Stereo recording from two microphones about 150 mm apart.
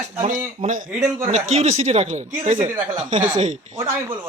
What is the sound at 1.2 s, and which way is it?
Speech, 50° right (ahead or behind).